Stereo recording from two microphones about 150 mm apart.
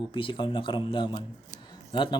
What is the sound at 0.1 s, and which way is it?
Speech, 35° left (ahead or behind).